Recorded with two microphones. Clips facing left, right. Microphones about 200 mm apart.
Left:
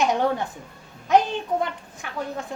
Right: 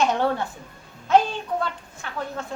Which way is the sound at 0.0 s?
15° left (ahead or behind).